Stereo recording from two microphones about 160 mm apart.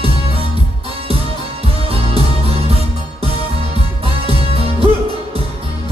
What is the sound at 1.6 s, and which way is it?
Music, 35° right (ahead or behind).